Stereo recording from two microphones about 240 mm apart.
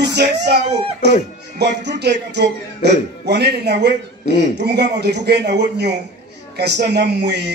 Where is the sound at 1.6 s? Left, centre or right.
Right.